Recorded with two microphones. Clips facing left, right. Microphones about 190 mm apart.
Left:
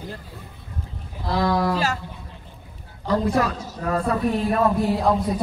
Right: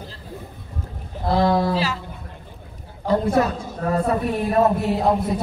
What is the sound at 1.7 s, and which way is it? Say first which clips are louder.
Music: right 1 dB; 45° left (ahead or behind).